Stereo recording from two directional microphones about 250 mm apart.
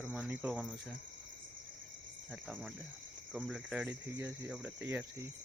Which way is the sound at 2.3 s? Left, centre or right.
Centre.